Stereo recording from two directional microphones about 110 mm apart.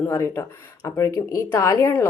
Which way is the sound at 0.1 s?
25° left (ahead or behind).